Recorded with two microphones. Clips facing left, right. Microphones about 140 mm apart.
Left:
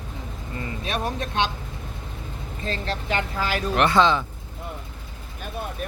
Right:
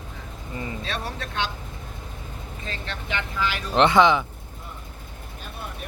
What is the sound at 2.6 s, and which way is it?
Speech, 35° left (ahead or behind).